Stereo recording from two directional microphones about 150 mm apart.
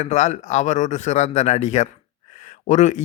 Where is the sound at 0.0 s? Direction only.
50° left (ahead or behind).